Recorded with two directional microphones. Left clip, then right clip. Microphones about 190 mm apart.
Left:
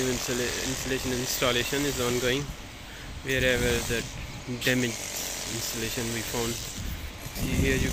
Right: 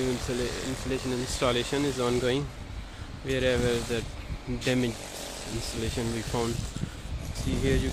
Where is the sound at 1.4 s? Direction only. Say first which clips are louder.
Even; 15° right (ahead or behind).